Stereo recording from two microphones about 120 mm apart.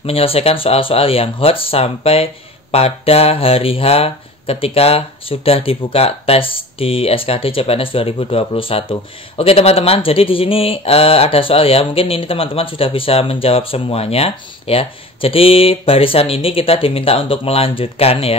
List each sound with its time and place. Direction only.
0.0 s speech: 55° left (ahead or behind)